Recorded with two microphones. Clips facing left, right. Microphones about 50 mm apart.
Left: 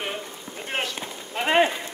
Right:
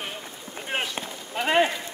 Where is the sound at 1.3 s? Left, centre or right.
Centre.